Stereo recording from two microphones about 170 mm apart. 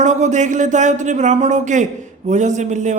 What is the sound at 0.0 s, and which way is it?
A man's voice, 45° right (ahead or behind).